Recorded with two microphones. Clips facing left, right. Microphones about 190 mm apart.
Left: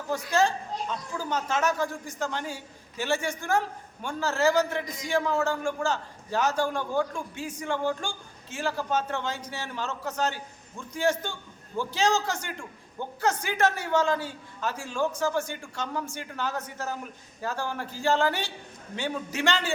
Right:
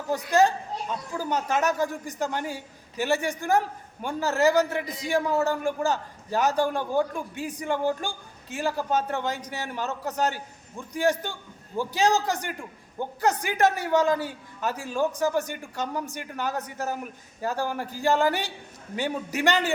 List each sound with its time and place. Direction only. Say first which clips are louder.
0.1 s a man's voice: right 4 dB; 15° right (ahead or behind)